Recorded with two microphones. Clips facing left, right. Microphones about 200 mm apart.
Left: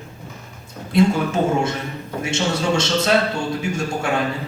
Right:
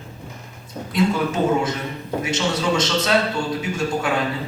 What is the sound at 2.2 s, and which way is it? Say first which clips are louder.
Speech: left 2 dB; 25° left (ahead or behind).